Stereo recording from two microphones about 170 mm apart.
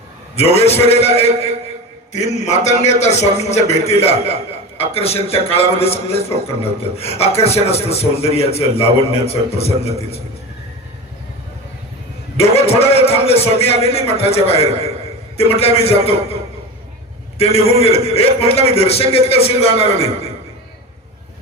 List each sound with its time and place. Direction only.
0.3 s a man's voice: 40° left (ahead or behind)
2.2 s a man's voice: 40° left (ahead or behind)
12.4 s a man's voice: 35° left (ahead or behind)